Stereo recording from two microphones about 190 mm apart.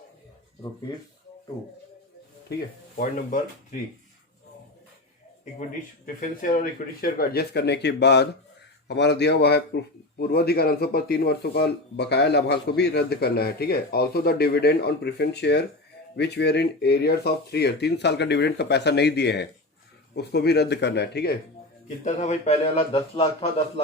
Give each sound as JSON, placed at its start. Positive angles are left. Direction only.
{"t": 2.5, "sound": "a man's voice", "side_deg": 55}
{"t": 3.0, "sound": "speech", "side_deg": 45}
{"t": 6.1, "sound": "a man's voice", "side_deg": 45}
{"t": 22.0, "sound": "a man's voice", "side_deg": 35}